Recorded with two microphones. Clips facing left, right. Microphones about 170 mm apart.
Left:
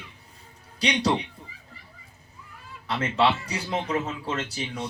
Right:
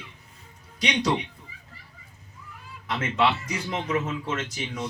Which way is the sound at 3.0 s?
35° left (ahead or behind).